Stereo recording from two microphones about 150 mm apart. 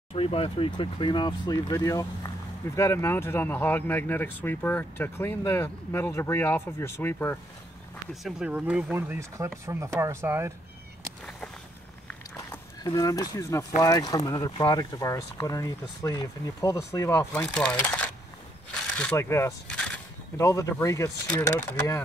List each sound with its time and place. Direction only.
0.1 s speech: 40° left (ahead or behind); by 7.3 s 15° left (ahead or behind)
8.1 s speech: centre (ahead or behind); by 10.5 s 15° right (ahead or behind)
12.1 s walk: 10° left (ahead or behind)
12.8 s speech: 25° left (ahead or behind)
17.3 s speech: 5° left (ahead or behind)
18.7 s a sound: 5° left (ahead or behind)
19.1 s speech: 20° left (ahead or behind)
19.7 s a sound: 5° left (ahead or behind)
20.3 s speech: 20° left (ahead or behind)